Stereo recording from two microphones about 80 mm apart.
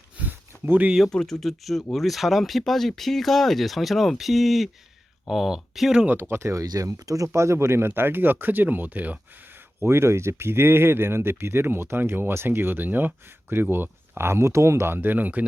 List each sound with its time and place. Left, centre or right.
0.2 s a sound: right
0.9 s speech: centre
6.1 s speech: right
9.8 s speech: right